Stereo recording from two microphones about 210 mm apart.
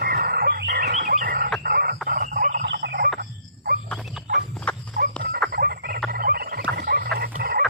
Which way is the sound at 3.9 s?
Centre (ahead or behind).